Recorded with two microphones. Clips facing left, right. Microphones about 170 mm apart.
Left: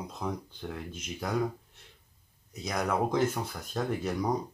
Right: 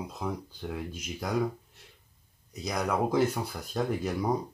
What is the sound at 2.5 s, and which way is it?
Speech, centre (ahead or behind).